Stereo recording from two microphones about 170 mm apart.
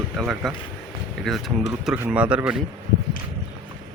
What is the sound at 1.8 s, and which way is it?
Speech, 10° right (ahead or behind).